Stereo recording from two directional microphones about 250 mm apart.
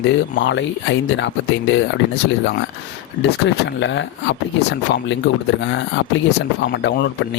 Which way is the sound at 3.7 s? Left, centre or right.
Left.